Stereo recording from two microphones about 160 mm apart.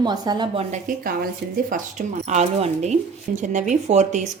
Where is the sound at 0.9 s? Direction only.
55° right (ahead or behind).